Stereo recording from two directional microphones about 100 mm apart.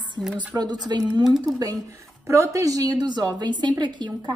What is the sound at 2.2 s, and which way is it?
A woman's voice, 25° right (ahead or behind).